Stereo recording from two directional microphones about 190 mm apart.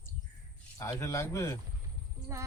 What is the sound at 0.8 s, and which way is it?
Speech, 15° left (ahead or behind).